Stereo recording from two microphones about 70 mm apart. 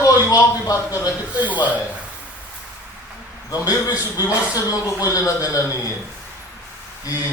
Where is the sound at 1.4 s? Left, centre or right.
Right.